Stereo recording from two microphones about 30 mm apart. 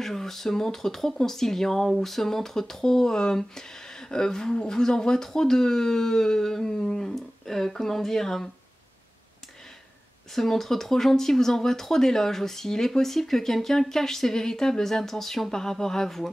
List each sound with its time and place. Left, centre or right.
0.0 s speech: centre
10.3 s speech: centre